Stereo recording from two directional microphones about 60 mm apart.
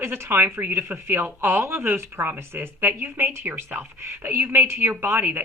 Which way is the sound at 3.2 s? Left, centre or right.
Right.